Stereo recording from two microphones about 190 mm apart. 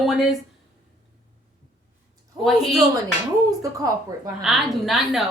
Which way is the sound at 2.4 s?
Centre (ahead or behind).